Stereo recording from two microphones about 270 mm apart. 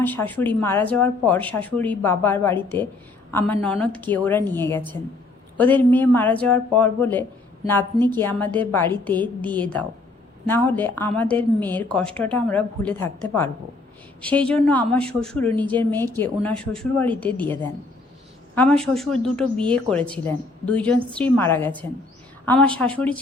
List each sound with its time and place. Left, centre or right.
0.0 s speech: centre